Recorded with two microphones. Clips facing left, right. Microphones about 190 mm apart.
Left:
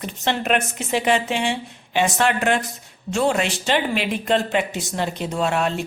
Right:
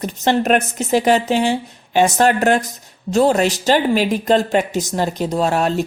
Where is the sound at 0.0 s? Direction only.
40° right (ahead or behind).